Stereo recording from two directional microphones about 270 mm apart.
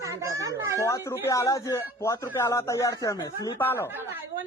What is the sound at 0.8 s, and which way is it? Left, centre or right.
Speech, centre.